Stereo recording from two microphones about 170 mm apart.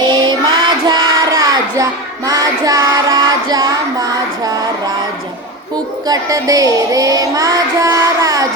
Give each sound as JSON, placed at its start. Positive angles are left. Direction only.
{"t": 0.1, "sound": "child singing", "side_deg": -25}
{"t": 6.1, "sound": "child singing", "side_deg": -20}